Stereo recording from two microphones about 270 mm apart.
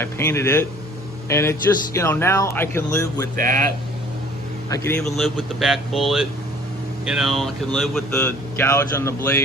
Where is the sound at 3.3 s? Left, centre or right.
Right.